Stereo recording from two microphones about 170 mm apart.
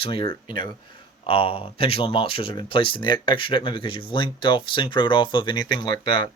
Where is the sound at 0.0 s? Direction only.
30° left (ahead or behind).